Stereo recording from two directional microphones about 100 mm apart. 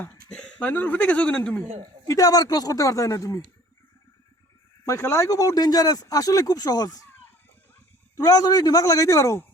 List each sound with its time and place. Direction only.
0.3 s speech: 15° left (ahead or behind)
2.0 s speech: 35° left (ahead or behind)
4.9 s speech: 30° left (ahead or behind)
8.1 s speech: 40° left (ahead or behind)